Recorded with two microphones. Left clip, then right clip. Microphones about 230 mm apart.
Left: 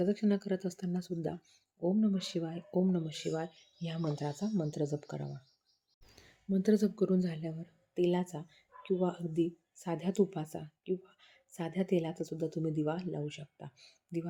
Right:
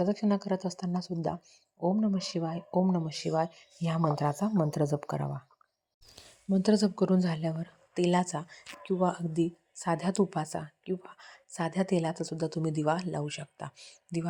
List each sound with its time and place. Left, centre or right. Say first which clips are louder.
0.0 s speech: right 3 dB; centre
6.5 s speech: right 3 dB; centre